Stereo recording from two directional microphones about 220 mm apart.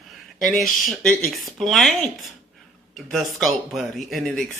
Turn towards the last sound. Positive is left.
turn(degrees=0)  # may be behind; listen again after turning